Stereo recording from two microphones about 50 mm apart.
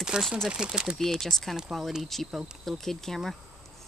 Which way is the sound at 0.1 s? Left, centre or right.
Centre.